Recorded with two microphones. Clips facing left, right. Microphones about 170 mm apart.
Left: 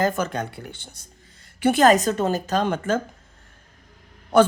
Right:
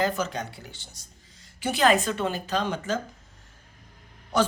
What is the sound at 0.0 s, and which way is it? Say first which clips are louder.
Speech: left 4 dB; 55° left (ahead or behind).